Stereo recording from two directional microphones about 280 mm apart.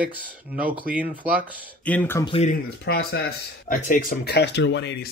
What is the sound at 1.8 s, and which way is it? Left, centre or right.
Speech, centre.